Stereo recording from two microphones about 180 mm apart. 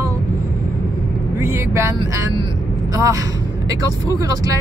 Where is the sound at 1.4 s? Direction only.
15° right (ahead or behind).